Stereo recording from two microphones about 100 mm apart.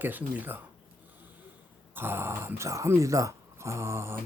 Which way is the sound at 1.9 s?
25° right (ahead or behind).